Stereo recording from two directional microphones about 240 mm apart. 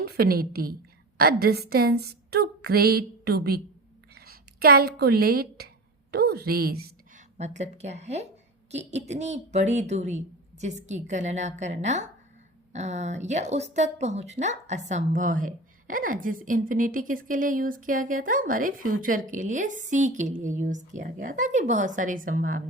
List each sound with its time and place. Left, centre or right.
0.0 s a woman's voice: right
4.1 s a sound: right
7.3 s a woman's voice: right